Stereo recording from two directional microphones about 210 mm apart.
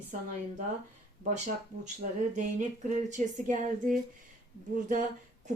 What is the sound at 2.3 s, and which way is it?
Speech, 35° right (ahead or behind).